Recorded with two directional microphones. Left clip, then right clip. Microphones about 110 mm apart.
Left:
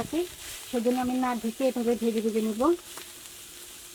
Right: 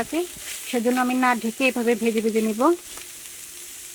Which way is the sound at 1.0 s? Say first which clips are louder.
Right 8 dB; 55° right (ahead or behind).